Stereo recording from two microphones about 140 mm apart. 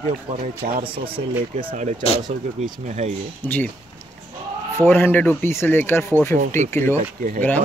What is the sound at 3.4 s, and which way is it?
Speech, 15° left (ahead or behind).